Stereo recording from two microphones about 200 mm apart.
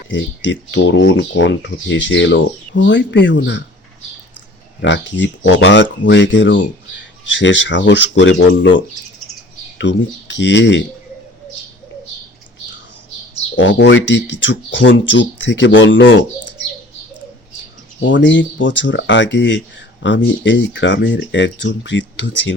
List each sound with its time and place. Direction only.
0.1 s speech: 65° left (ahead or behind)
4.8 s speech: 60° left (ahead or behind)
13.6 s speech: 65° left (ahead or behind)
18.0 s speech: 65° left (ahead or behind)